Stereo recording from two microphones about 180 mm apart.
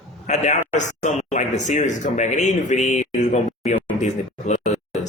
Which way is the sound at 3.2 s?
40° left (ahead or behind).